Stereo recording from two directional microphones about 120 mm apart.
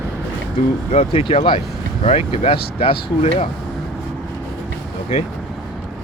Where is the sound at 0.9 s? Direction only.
55° left (ahead or behind).